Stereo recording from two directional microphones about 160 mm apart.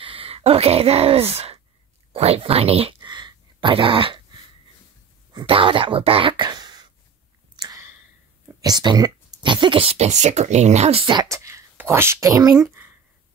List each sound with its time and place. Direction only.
0.0 s speech: 35° right (ahead or behind)
3.0 s speech: 25° right (ahead or behind)
5.3 s speech: 30° right (ahead or behind)
7.5 s a sound: 20° right (ahead or behind)
8.5 s speech: 25° right (ahead or behind)